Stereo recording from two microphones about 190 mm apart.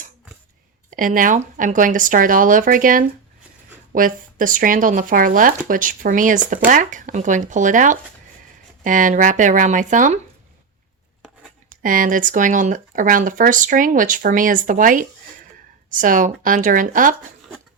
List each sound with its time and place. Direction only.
0.9 s speech: 45° right (ahead or behind)
11.7 s speech: 45° right (ahead or behind)